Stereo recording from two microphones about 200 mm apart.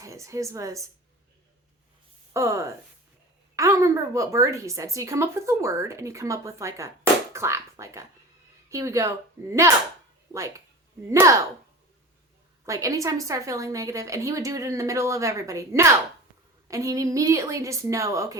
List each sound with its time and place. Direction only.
0.0 s a woman's voice: 15° right (ahead or behind)
2.3 s a woman's voice: 15° right (ahead or behind)
11.1 s a woman's voice: 15° right (ahead or behind)
12.6 s a woman's voice: 15° right (ahead or behind)